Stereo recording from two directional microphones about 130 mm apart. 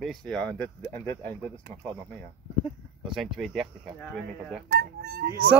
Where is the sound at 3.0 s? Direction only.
Centre (ahead or behind).